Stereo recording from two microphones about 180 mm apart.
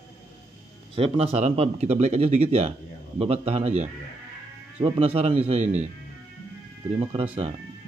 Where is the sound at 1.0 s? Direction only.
35° right (ahead or behind).